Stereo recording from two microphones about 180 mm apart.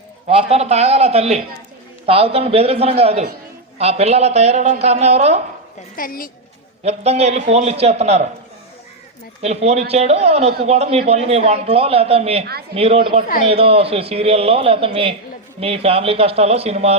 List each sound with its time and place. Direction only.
0.3 s a man's voice: 35° right (ahead or behind)
6.0 s a woman's voice: 50° left (ahead or behind)
6.8 s a man's voice: 35° right (ahead or behind)
9.4 s a man's voice: 35° right (ahead or behind)